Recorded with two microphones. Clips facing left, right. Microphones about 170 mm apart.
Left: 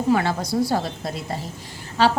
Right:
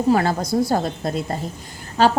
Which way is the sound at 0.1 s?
40° right (ahead or behind).